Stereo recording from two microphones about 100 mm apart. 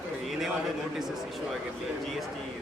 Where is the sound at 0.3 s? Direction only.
Centre (ahead or behind).